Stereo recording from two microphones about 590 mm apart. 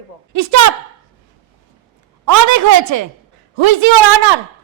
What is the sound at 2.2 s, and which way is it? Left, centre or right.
Speech, right.